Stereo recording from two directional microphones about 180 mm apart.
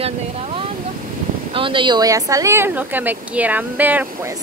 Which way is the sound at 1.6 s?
30° right (ahead or behind).